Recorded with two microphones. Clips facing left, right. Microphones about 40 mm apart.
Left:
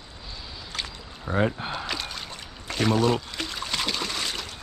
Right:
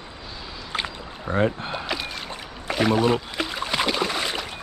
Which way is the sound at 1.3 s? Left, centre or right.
Centre.